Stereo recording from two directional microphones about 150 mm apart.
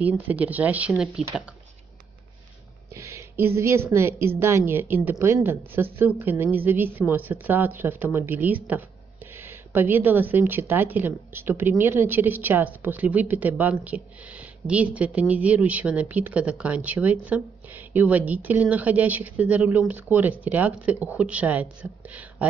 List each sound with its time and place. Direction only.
0.0 s a woman's voice: 10° right (ahead or behind)
2.9 s a woman's voice: 20° right (ahead or behind)